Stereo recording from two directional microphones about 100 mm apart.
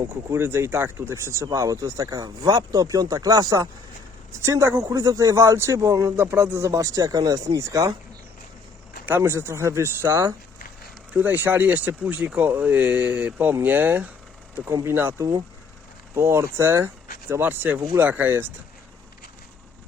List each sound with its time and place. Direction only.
0.1 s speech: 25° right (ahead or behind); by 3.7 s 40° right (ahead or behind)
4.4 s speech: 25° right (ahead or behind)
9.0 s speech: 25° right (ahead or behind)
14.7 s speech: 30° right (ahead or behind)
14.9 s speech: 20° right (ahead or behind)